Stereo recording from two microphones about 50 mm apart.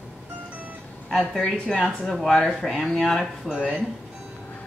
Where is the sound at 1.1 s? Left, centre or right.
Centre.